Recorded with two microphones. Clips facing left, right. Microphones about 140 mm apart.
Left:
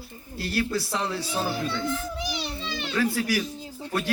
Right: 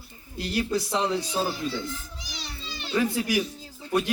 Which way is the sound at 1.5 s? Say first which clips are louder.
Left 3 dB; 65° left (ahead or behind).